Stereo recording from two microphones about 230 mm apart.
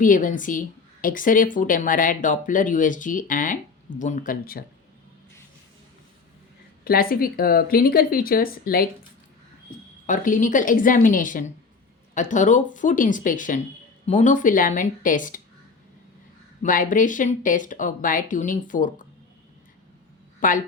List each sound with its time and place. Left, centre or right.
0.0 s speech: left
6.8 s speech: left
10.1 s speech: left
16.6 s speech: left
20.4 s speech: left